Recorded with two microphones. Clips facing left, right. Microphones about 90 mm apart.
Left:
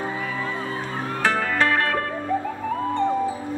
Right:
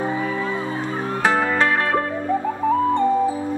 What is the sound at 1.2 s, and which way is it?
Music, 20° right (ahead or behind).